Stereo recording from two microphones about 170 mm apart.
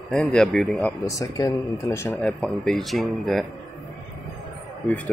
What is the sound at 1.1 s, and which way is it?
Speech, 20° left (ahead or behind).